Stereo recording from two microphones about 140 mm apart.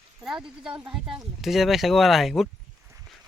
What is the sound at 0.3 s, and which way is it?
Speech, 5° right (ahead or behind).